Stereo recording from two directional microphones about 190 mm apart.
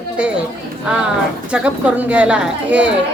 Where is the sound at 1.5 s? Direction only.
5° right (ahead or behind).